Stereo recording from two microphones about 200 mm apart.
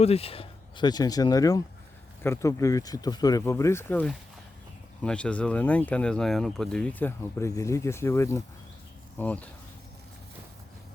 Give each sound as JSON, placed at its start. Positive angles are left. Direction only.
{"t": 0.0, "sound": "speech", "side_deg": 30}